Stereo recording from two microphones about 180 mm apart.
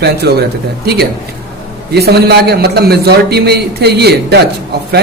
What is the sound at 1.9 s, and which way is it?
A man's voice, 65° right (ahead or behind).